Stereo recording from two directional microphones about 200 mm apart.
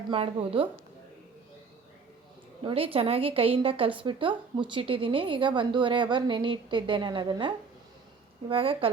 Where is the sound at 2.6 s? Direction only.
30° right (ahead or behind).